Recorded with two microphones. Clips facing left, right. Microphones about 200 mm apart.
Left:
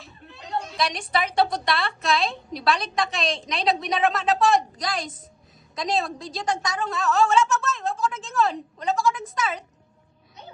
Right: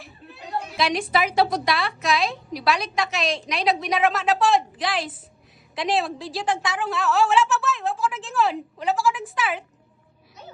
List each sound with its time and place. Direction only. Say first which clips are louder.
0.9 s a woman's voice: right 2 dB; centre (ahead or behind)